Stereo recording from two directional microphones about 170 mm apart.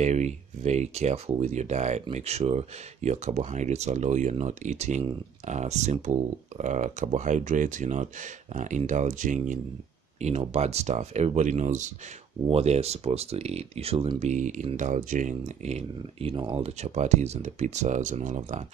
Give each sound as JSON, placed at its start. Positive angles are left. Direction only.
{"t": 0.0, "sound": "speech", "side_deg": -45}